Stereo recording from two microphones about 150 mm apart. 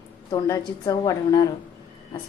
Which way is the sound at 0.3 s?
25° left (ahead or behind).